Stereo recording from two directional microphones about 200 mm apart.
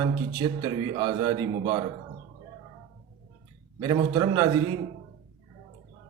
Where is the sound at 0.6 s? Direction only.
20° right (ahead or behind).